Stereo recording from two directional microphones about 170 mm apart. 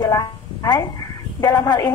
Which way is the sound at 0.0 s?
20° left (ahead or behind).